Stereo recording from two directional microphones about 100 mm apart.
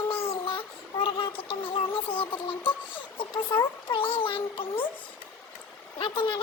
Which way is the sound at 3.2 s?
55° left (ahead or behind).